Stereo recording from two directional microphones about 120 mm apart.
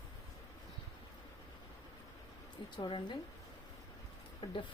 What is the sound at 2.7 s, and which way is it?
Speech, 40° left (ahead or behind).